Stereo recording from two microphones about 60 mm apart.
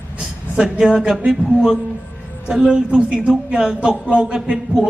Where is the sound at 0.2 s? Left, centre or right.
Centre.